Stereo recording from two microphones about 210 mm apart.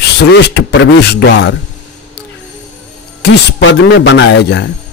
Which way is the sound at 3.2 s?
55° left (ahead or behind).